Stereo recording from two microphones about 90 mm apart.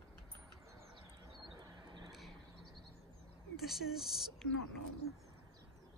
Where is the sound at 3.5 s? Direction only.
5° right (ahead or behind).